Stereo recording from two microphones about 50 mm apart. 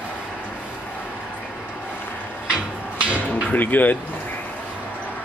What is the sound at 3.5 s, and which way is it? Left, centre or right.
Speech, left.